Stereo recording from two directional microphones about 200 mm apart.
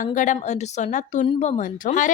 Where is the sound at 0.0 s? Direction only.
40° left (ahead or behind).